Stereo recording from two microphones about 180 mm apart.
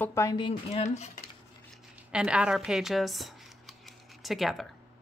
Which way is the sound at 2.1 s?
5° right (ahead or behind).